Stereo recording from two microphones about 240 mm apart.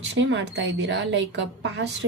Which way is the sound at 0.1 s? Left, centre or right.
Right.